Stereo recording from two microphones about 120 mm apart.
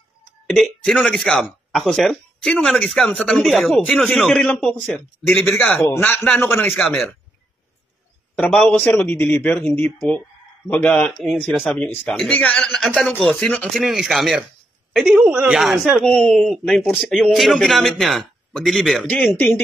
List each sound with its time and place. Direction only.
0.5 s speech: 5° left (ahead or behind)
5.5 s a man's voice: 15° left (ahead or behind)
6.7 s speech: centre (ahead or behind)
8.4 s a man's voice: 10° left (ahead or behind)
11.9 s a man's voice: 20° left (ahead or behind)
12.6 s speech: centre (ahead or behind)
13.4 s a man's voice: 10° left (ahead or behind)
13.7 s a woman's voice: 5° right (ahead or behind)
15.2 s speech: 15° right (ahead or behind)
15.5 s speech: 5° right (ahead or behind)
16.1 s a man's voice: 10° left (ahead or behind)
16.4 s speech: centre (ahead or behind)
19.0 s a man's voice: 15° left (ahead or behind)